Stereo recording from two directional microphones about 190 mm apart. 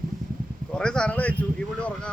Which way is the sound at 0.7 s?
5° left (ahead or behind).